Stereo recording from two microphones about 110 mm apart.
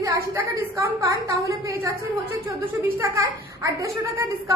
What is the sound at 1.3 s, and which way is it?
Speech, 30° right (ahead or behind).